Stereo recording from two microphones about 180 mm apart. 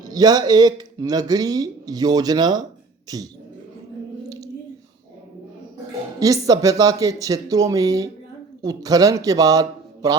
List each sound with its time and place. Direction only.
0.0 s speech: 20° right (ahead or behind)
6.1 s a man's voice: 20° right (ahead or behind)